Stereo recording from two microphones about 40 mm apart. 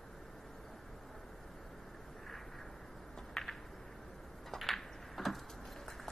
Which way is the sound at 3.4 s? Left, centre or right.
Centre.